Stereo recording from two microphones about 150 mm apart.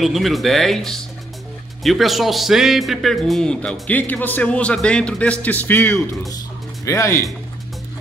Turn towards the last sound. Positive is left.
turn(degrees=20)  # may be behind; listen again after turning